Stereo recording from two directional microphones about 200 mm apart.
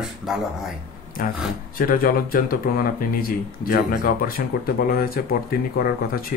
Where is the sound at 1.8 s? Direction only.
45° left (ahead or behind).